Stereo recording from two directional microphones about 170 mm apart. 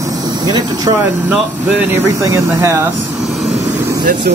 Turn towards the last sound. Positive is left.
turn(degrees=-60)  # may be behind; listen again after turning